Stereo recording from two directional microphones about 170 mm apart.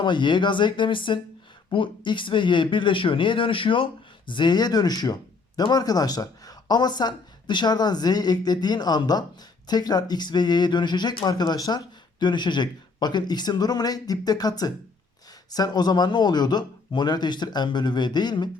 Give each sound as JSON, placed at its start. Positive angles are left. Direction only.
{"t": 0.0, "sound": "speech", "side_deg": 25}